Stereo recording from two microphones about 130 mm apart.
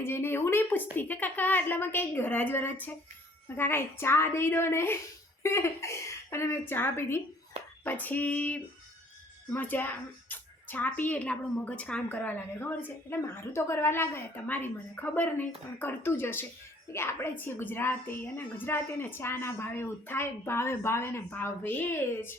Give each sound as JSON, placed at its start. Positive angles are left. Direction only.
{"t": 0.0, "sound": "a woman's voice", "side_deg": 15}